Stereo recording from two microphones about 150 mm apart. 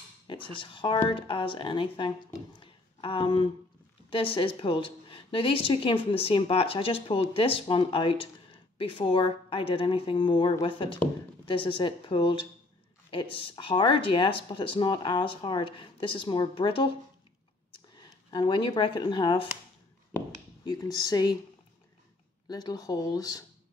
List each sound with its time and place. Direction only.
0.3 s speech: 30° left (ahead or behind)
17.9 s speech: 30° left (ahead or behind)
20.6 s speech: 25° left (ahead or behind)
22.5 s speech: 25° left (ahead or behind)